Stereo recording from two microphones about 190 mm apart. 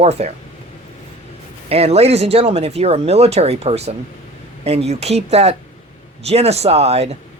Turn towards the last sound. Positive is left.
turn(degrees=-35)  # may be behind; listen again after turning